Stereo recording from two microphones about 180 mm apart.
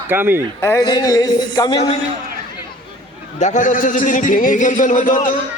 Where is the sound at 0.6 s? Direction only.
20° left (ahead or behind).